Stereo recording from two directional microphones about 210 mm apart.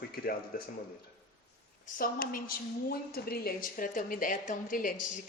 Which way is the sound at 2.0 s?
45° left (ahead or behind).